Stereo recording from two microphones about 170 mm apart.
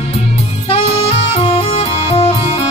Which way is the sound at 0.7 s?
40° left (ahead or behind).